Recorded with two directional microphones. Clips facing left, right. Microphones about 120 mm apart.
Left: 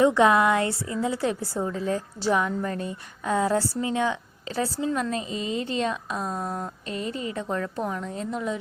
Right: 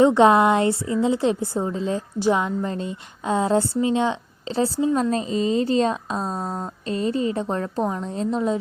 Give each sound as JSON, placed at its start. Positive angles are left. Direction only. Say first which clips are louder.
{"t": 0.0, "sound": "a woman's voice", "louder": "right 4 dB", "side_deg": -25}
{"t": 5.1, "sound": "speech", "louder": "right 7 dB", "side_deg": -35}